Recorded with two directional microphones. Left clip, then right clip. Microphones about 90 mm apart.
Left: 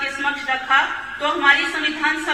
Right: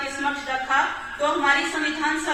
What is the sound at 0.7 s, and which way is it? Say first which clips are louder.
A woman's voice: left 4 dB; 15° right (ahead or behind).